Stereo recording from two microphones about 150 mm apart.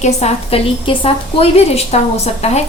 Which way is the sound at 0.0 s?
45° left (ahead or behind).